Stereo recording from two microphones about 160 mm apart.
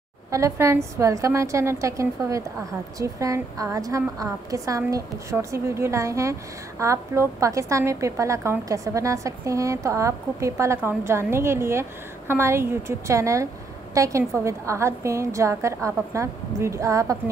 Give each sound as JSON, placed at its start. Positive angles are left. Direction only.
{"t": 0.3, "sound": "a woman's voice", "side_deg": -20}